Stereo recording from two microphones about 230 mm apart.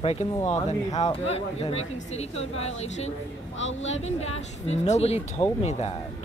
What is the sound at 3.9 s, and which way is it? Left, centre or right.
Speech, left.